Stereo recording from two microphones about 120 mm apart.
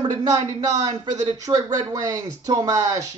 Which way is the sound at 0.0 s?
35° right (ahead or behind).